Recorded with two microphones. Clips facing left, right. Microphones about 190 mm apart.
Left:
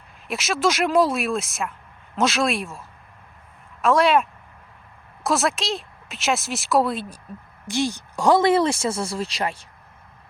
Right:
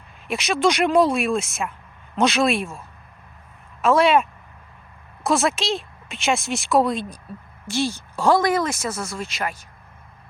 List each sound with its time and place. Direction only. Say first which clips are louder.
0.3 s speech: right 2 dB; centre (ahead or behind)
7.7 s speech: even; 15° left (ahead or behind)